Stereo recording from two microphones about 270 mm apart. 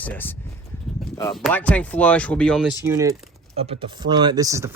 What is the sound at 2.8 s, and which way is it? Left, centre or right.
Speech, centre.